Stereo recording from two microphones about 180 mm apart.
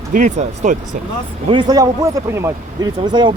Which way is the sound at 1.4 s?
25° right (ahead or behind).